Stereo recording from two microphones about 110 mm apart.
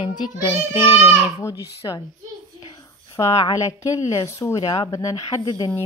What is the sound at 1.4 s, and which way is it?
Speech, 30° left (ahead or behind).